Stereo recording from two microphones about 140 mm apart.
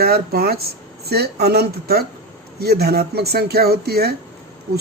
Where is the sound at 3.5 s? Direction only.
90° right.